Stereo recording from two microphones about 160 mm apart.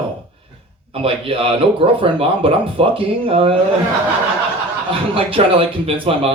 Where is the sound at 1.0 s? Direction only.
35° right (ahead or behind).